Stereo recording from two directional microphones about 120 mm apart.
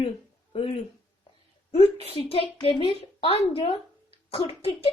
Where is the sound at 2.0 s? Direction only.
50° left (ahead or behind).